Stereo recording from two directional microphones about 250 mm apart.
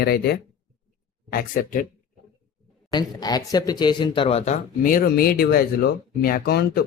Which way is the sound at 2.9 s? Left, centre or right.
Centre.